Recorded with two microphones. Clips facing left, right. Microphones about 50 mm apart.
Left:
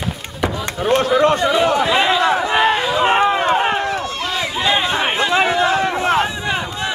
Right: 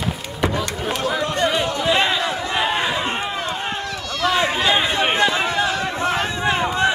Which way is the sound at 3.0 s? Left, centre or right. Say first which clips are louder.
Left 10 dB; left.